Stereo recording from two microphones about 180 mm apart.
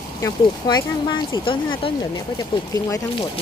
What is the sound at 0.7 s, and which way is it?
Speech, 25° left (ahead or behind).